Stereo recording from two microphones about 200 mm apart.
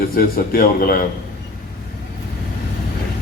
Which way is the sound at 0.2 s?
45° left (ahead or behind).